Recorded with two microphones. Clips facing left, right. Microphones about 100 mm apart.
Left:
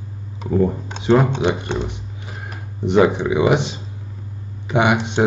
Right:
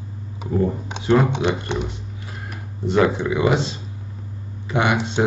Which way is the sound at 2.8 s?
20° left (ahead or behind).